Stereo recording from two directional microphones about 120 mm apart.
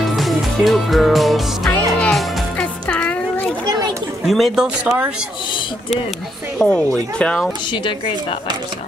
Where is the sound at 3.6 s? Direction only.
35° right (ahead or behind).